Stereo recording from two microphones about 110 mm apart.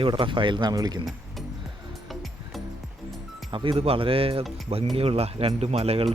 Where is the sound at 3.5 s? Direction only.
50° right (ahead or behind); by 6.1 s 70° right (ahead or behind).